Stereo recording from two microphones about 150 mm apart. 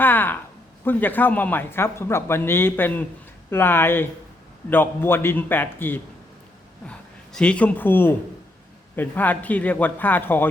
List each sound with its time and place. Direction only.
0.0 s a sound: 15° left (ahead or behind)
0.9 s speech: 10° left (ahead or behind)
7.3 s speech: 5° left (ahead or behind)